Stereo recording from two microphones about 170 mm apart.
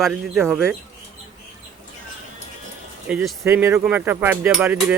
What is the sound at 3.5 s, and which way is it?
Speech, 15° right (ahead or behind).